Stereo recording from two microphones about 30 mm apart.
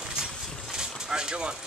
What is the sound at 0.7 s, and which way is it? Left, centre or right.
Vehicle, right.